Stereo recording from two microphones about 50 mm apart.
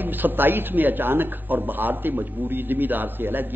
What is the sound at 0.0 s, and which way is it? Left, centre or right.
A man's voice, right.